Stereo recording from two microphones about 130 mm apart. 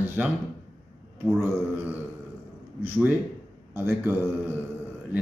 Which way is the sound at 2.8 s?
15° right (ahead or behind).